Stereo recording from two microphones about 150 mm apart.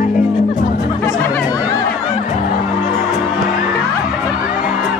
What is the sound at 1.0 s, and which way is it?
Music, 25° left (ahead or behind).